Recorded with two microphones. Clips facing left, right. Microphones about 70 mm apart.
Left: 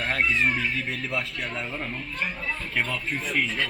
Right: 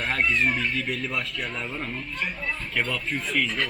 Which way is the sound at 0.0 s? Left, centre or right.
Centre.